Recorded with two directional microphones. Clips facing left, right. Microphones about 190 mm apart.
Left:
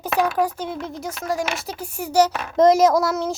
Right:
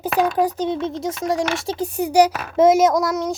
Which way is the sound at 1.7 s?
20° right (ahead or behind).